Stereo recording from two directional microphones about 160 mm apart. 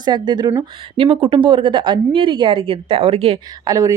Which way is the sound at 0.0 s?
25° right (ahead or behind).